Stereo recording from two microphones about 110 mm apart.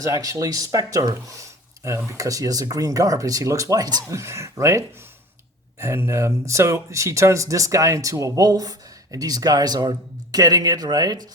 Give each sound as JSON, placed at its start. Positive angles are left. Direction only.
{"t": 0.0, "sound": "speech", "side_deg": -30}